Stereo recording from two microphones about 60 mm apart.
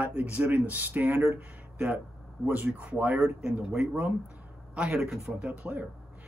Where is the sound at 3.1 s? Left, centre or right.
Centre.